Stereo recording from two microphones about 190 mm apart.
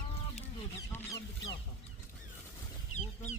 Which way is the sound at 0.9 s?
15° left (ahead or behind).